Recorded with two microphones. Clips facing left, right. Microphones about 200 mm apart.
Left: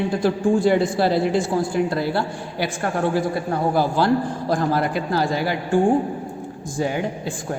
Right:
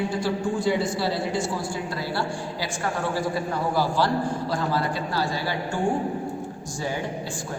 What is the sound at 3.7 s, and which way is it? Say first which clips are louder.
A man's voice: left 4 dB; 55° left (ahead or behind).